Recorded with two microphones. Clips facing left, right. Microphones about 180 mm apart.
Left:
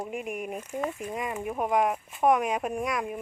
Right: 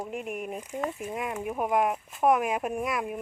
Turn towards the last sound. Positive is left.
turn(degrees=-5)  # may be behind; listen again after turning